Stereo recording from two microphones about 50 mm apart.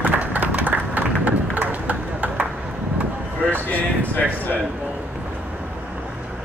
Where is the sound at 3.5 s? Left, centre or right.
Left.